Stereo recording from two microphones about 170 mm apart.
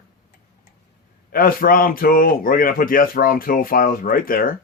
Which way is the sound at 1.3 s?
60° left (ahead or behind).